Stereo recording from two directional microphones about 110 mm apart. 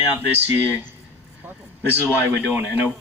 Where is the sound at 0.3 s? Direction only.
15° right (ahead or behind).